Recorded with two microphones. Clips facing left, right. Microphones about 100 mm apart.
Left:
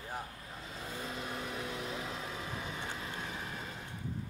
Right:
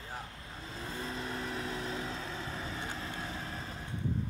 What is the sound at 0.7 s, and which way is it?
Vehicle, 35° right (ahead or behind).